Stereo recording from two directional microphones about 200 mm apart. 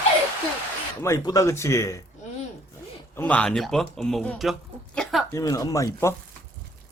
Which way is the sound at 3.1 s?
10° left (ahead or behind).